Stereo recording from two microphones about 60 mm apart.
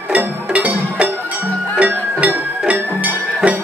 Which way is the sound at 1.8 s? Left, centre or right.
Centre.